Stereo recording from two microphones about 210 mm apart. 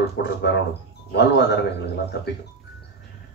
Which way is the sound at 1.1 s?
55° left (ahead or behind).